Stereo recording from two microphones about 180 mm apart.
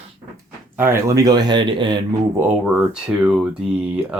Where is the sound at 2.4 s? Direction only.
10° right (ahead or behind).